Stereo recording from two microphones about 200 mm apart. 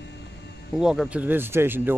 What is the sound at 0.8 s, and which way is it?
Speech, centre (ahead or behind).